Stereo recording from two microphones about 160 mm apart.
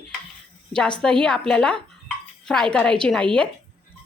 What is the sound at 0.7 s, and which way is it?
Speech, 5° left (ahead or behind).